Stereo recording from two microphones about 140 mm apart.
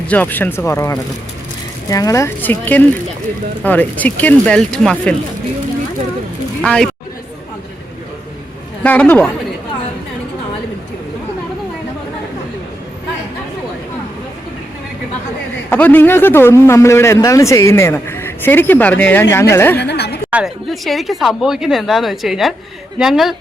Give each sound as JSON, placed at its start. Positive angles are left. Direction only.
{"t": 0.1, "sound": "speech", "side_deg": 10}
{"t": 6.6, "sound": "speech", "side_deg": 5}
{"t": 8.8, "sound": "speech", "side_deg": 10}
{"t": 15.7, "sound": "speech", "side_deg": 10}
{"t": 20.3, "sound": "speech", "side_deg": 0}